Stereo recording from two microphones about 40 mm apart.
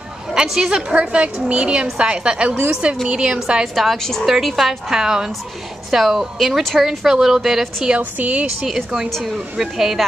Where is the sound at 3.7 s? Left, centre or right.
Centre.